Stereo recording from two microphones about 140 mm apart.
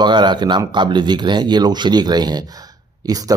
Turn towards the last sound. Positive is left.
turn(degrees=-25)  # may be behind; listen again after turning